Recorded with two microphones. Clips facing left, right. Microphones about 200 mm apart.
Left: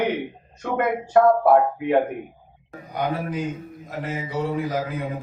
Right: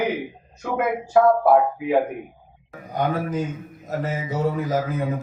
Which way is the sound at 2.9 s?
45° right (ahead or behind).